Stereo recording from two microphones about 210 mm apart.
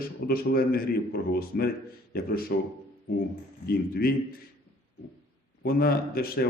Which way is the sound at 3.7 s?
45° left (ahead or behind).